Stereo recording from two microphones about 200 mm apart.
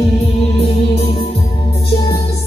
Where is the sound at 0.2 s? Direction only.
30° left (ahead or behind).